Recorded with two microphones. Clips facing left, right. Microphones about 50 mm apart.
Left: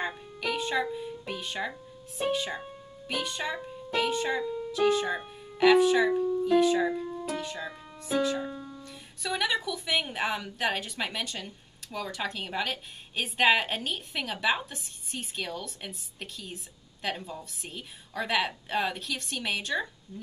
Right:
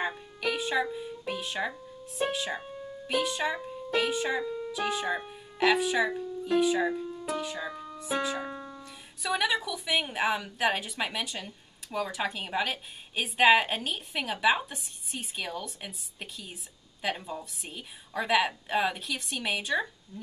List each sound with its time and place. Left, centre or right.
0.0 s a woman's voice: centre
7.7 s music: centre
8.0 s speech: centre
8.4 s music: right
8.8 s a woman's voice: centre